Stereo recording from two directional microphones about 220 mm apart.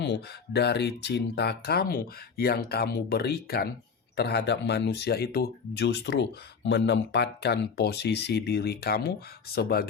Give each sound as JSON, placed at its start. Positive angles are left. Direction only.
{"t": 0.0, "sound": "speech", "side_deg": 50}